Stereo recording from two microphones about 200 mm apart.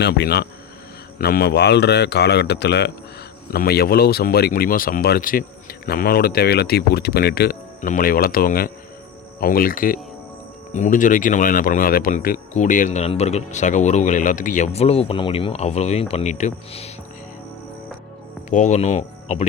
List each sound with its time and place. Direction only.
0.0 s a man's voice: 55° left (ahead or behind)
7.8 s speech: 40° left (ahead or behind)
18.5 s speech: 35° left (ahead or behind)